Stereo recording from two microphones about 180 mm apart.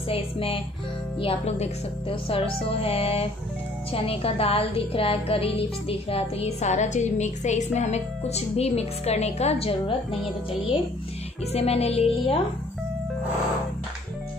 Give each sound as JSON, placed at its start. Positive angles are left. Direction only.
{"t": 0.1, "sound": "speech", "side_deg": 30}
{"t": 11.5, "sound": "speech", "side_deg": 35}